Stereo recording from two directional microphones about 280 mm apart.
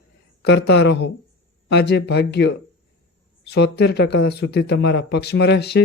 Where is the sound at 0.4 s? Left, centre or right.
Left.